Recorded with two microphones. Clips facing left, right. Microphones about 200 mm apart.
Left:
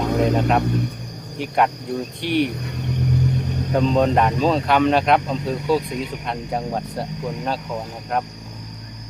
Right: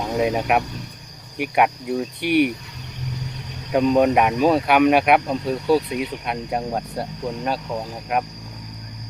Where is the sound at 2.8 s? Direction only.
55° left (ahead or behind).